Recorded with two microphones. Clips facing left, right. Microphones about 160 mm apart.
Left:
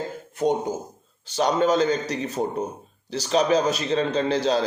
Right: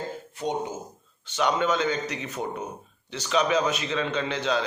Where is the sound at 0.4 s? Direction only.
45° left (ahead or behind).